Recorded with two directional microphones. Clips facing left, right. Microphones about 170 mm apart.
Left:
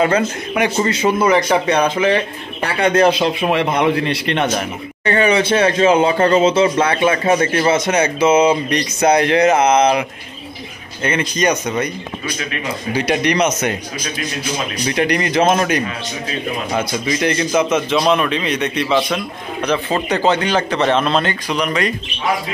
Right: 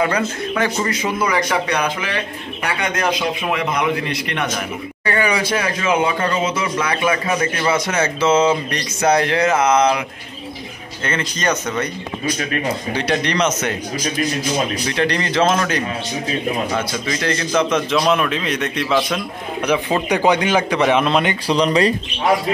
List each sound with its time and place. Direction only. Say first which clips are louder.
0.0 s a man's voice: left 3 dB; 25° left (ahead or behind)
11.1 s speech: left 4 dB; 15° left (ahead or behind)
12.9 s speech: left 5 dB; 10° left (ahead or behind)
14.9 s speech: left 2 dB; 15° left (ahead or behind)
17.0 s a man's voice: left 4 dB; 15° left (ahead or behind)
17.6 s a man's voice: even; 5° left (ahead or behind); by 21.4 s 15° right (ahead or behind)
21.5 s speech: right 3 dB; 30° right (ahead or behind)